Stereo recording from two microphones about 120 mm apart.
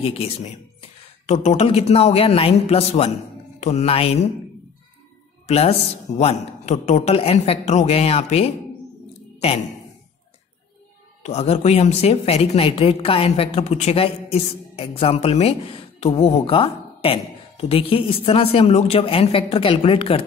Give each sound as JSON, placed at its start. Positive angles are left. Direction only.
{"t": 0.0, "sound": "speech", "side_deg": 55}
{"t": 3.5, "sound": "speech", "side_deg": 65}
{"t": 5.5, "sound": "speech", "side_deg": 60}
{"t": 11.2, "sound": "a woman's voice", "side_deg": 65}